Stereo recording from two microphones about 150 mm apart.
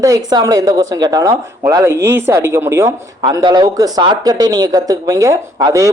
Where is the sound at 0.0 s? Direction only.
25° right (ahead or behind).